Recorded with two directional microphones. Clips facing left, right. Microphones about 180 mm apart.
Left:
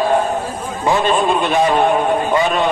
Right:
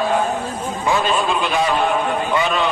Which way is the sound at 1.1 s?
45° left (ahead or behind).